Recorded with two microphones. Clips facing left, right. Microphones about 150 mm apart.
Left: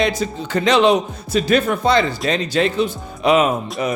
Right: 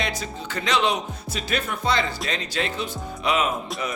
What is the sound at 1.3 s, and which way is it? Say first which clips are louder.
Speech: left 12 dB; 80° left.